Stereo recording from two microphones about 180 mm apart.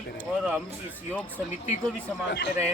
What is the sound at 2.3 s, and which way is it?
Speech, 80° left.